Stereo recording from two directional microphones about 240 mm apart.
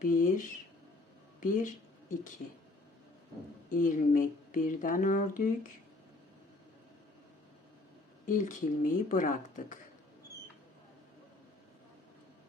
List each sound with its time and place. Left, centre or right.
0.0 s speech: left
3.7 s speech: left
8.3 s speech: left